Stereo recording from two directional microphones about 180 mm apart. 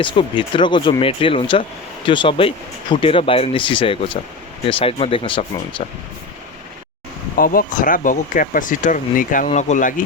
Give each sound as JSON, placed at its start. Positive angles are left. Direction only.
{"t": 0.0, "sound": "speech", "side_deg": 25}
{"t": 7.3, "sound": "speech", "side_deg": 55}